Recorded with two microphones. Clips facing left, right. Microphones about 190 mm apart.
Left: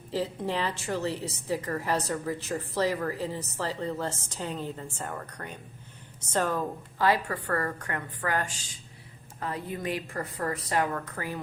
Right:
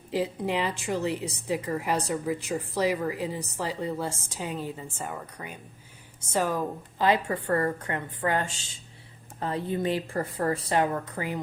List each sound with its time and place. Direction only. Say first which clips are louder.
0.1 s a woman's voice: right 2 dB; 15° right (ahead or behind)